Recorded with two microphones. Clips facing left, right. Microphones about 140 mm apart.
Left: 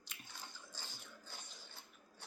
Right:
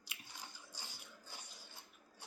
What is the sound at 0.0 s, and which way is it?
Biting, 10° right (ahead or behind).